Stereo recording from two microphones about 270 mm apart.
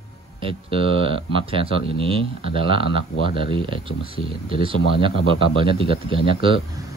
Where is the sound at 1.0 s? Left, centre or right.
Centre.